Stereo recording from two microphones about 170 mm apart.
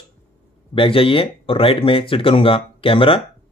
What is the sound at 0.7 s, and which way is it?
Speech, 30° left (ahead or behind).